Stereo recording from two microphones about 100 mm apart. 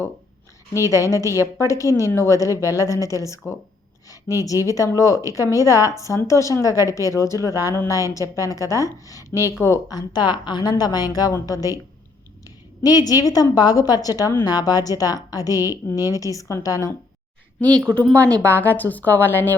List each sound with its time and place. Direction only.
0.9 s speech: 30° left (ahead or behind)
13.1 s speech: 40° left (ahead or behind)
17.6 s speech: 10° left (ahead or behind)